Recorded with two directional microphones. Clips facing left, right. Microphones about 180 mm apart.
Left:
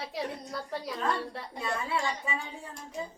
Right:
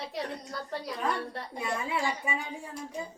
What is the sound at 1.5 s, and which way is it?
Speech, 15° right (ahead or behind).